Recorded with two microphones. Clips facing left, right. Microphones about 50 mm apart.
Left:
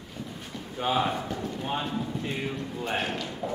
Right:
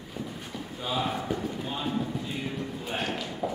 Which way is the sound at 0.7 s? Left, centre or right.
Left.